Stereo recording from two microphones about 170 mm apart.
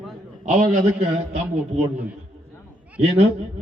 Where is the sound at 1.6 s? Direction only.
5° right (ahead or behind).